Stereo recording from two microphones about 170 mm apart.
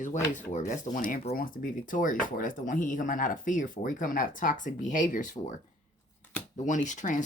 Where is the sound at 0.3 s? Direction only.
50° left (ahead or behind).